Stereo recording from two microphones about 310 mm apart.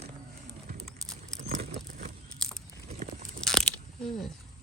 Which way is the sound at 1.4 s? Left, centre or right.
Right.